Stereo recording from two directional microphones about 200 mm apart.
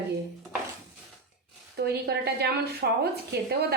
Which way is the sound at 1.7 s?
55° right (ahead or behind).